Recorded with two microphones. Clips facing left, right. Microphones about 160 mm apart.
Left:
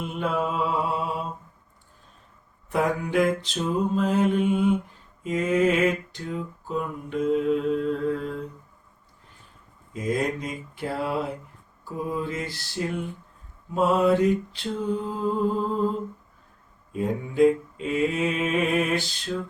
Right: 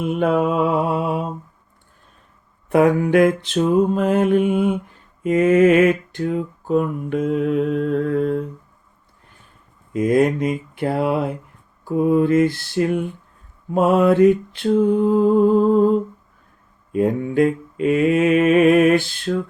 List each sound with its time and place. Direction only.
0.0 s mantra: 60° right (ahead or behind)
2.6 s mantra: 60° right (ahead or behind)
9.9 s mantra: 60° right (ahead or behind)
16.9 s mantra: 65° right (ahead or behind)